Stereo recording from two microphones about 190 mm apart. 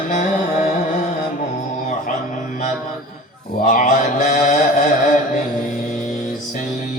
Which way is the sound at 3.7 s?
40° left (ahead or behind).